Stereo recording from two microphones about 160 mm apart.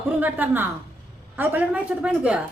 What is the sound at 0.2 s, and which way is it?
A woman's voice, 10° right (ahead or behind).